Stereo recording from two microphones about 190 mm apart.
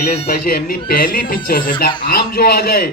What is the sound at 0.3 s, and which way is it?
Speech, 50° left (ahead or behind).